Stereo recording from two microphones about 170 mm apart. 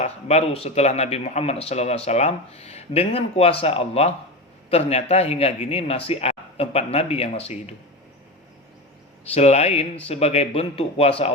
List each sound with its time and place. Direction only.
0.0 s speech: 40° left (ahead or behind)
9.3 s speech: 40° left (ahead or behind)